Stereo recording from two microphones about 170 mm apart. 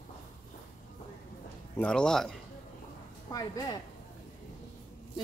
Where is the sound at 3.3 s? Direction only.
20° left (ahead or behind).